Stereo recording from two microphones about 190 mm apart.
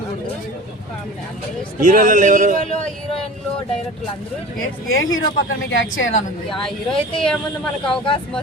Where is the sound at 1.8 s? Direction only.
45° right (ahead or behind).